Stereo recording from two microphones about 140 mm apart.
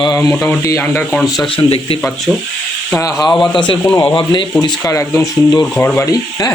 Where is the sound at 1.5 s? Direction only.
40° left (ahead or behind).